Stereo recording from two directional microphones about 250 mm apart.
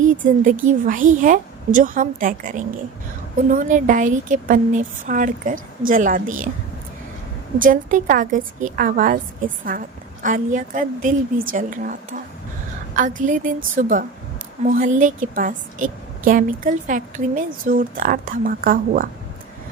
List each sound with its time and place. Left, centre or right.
0.0 s a woman's voice: right
7.6 s a woman's voice: right